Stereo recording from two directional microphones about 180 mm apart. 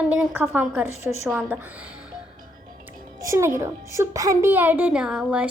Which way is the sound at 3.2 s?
15° right (ahead or behind).